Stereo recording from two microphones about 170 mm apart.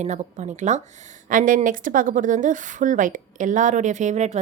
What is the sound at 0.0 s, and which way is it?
A woman's voice, 45° right (ahead or behind).